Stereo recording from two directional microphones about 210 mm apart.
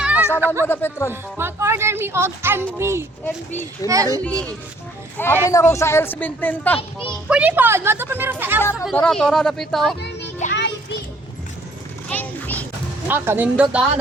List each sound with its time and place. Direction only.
0.3 s speech: 10° right (ahead or behind)
0.7 s speech: 10° left (ahead or behind)
1.1 s speech: 10° right (ahead or behind)
3.2 s speech: 10° left (ahead or behind)
3.8 s speech: 15° right (ahead or behind)
4.2 s speech: 5° left (ahead or behind)
6.7 s a child's voice: 25° left (ahead or behind)
7.3 s speech: 5° right (ahead or behind)
8.7 s speech: 5° left (ahead or behind)
10.5 s music: 55° left (ahead or behind)
12.0 s a sound: 10° left (ahead or behind)
13.1 s speech: 10° right (ahead or behind)